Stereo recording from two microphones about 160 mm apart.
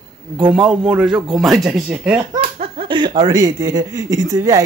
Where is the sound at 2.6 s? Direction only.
35° right (ahead or behind).